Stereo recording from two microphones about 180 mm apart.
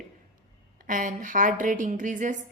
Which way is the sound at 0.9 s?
45° right (ahead or behind).